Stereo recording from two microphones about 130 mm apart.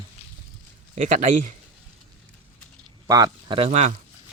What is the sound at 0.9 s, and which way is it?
Speech, 70° right (ahead or behind).